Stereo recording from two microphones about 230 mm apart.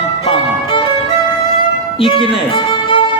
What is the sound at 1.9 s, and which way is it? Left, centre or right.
Music, left.